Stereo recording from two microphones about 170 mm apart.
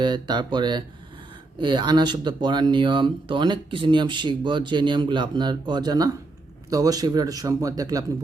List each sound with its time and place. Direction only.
0.0 s speech: 25° right (ahead or behind)